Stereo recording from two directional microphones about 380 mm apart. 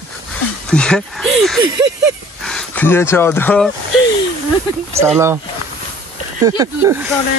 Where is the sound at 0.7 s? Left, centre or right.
Centre.